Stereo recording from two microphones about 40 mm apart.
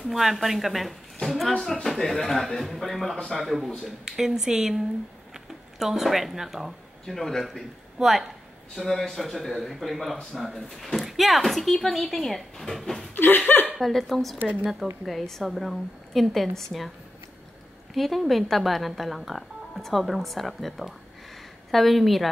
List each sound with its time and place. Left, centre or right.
0.0 s speech: centre
13.1 s a sound: left
13.7 s speech: centre
17.9 s speech: centre